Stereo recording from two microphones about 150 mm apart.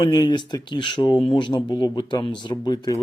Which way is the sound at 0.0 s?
25° left (ahead or behind).